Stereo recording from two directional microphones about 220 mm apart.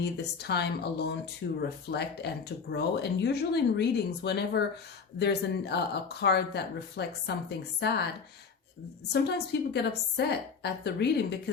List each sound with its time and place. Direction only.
0.0 s speech: 50° left (ahead or behind)
9.1 s speech: 50° left (ahead or behind)